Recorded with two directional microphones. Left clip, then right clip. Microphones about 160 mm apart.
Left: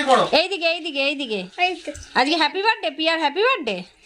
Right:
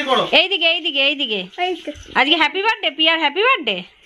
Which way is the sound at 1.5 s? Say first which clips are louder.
Left 5 dB; 35° right (ahead or behind).